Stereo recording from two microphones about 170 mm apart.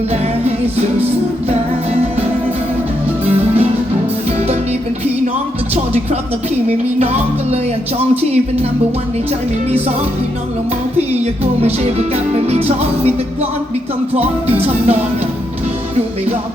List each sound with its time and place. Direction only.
5.7 s music: 35° right (ahead or behind)
12.5 s music: 40° right (ahead or behind)
14.6 s music: 40° right (ahead or behind)